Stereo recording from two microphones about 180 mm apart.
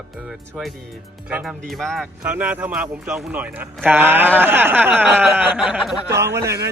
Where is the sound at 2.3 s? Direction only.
10° right (ahead or behind).